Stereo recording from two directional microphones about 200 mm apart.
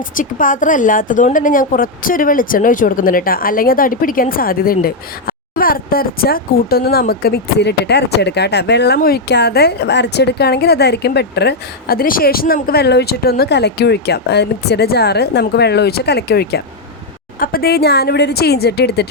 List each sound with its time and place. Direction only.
0.2 s a woman's voice: 40° left (ahead or behind)